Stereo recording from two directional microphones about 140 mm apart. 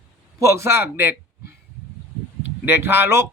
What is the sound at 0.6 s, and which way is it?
Speech, 20° right (ahead or behind).